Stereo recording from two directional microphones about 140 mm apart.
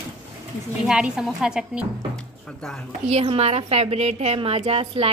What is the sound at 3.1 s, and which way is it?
A woman's voice, 45° right (ahead or behind).